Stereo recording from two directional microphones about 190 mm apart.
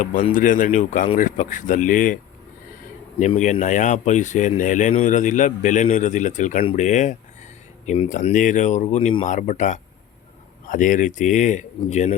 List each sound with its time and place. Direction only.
0.0 s speech: 45° left (ahead or behind)
3.2 s speech: 40° left (ahead or behind)